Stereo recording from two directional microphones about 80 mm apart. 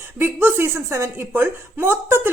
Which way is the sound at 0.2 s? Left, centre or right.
Right.